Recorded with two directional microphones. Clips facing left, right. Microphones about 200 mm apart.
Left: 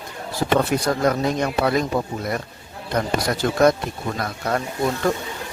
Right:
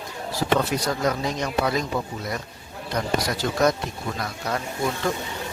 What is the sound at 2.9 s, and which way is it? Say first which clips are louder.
Speech: left 3 dB; 55° left (ahead or behind).